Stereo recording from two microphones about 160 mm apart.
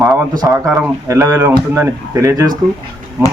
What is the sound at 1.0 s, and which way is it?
A man's voice, 20° right (ahead or behind).